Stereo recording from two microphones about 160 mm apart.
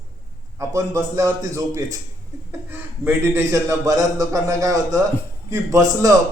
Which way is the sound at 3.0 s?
15° right (ahead or behind).